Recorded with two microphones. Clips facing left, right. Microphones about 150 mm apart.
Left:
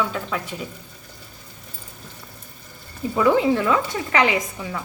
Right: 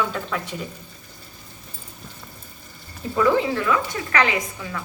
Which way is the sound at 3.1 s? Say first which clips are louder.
Left 2 dB; 15° left (ahead or behind).